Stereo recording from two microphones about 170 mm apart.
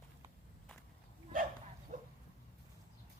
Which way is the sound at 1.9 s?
45° right (ahead or behind).